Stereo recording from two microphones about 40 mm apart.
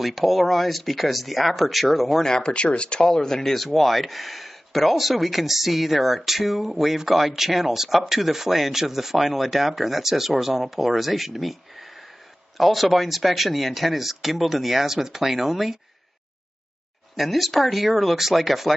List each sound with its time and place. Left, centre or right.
0.0 s speech: centre
2.2 s speech: centre
3.1 s speech: centre
17.1 s speech: centre